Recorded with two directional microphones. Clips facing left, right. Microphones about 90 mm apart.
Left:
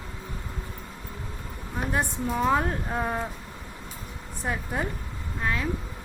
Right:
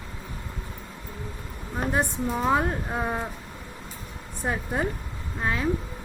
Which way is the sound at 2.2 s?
10° right (ahead or behind).